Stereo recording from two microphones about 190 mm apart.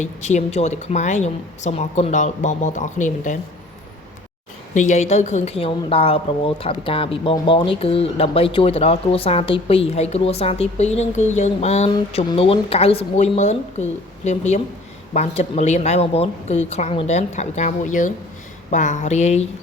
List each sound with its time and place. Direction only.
0.0 s a woman's voice: 40° left (ahead or behind)
4.7 s a woman's voice: 40° left (ahead or behind)
11.9 s a woman's voice: 25° left (ahead or behind)